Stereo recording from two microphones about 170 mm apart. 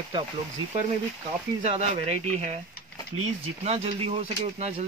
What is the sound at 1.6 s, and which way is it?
Speech, 40° right (ahead or behind).